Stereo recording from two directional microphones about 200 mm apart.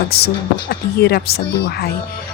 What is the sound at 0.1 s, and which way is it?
A woman's voice, 50° left (ahead or behind).